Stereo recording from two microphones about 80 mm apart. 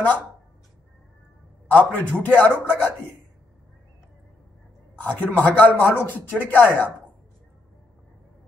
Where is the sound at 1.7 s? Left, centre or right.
Centre.